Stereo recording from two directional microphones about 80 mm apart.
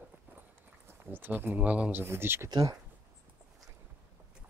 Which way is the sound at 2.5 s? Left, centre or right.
Right.